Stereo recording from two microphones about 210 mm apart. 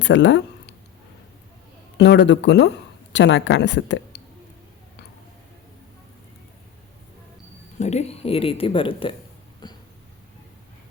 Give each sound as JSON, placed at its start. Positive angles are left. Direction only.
{"t": 0.0, "sound": "speech", "side_deg": 60}
{"t": 2.0, "sound": "speech", "side_deg": 55}
{"t": 7.8, "sound": "speech", "side_deg": 30}
{"t": 9.6, "sound": "a sound", "side_deg": 20}